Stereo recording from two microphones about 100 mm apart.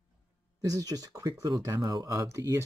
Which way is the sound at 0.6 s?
35° right (ahead or behind).